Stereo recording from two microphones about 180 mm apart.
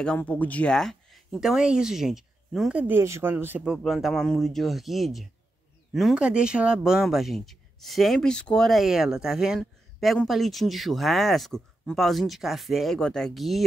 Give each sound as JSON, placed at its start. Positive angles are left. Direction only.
{"t": 0.0, "sound": "speech", "side_deg": 5}